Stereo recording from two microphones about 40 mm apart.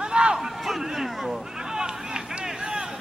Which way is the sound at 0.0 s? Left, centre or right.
Right.